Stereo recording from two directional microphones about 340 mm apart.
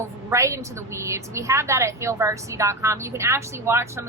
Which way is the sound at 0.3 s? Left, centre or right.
Centre.